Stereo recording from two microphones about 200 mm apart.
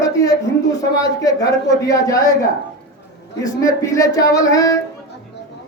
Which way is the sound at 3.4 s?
15° left (ahead or behind).